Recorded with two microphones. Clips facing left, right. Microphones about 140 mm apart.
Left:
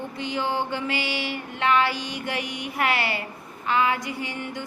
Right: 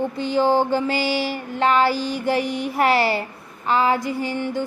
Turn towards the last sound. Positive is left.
turn(degrees=-35)  # may be behind; listen again after turning